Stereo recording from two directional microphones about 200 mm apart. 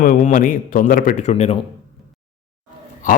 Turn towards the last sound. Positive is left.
turn(degrees=40)  # may be behind; listen again after turning